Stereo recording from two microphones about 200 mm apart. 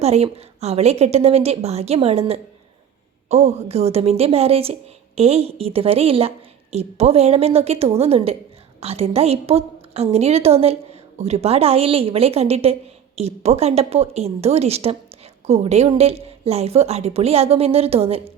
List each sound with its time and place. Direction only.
0.0 s a woman's voice: 30° right (ahead or behind)